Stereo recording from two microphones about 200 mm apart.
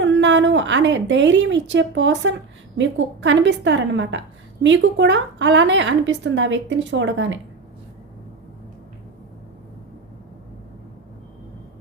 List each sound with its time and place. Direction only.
0.0 s a woman's voice: 65° right (ahead or behind)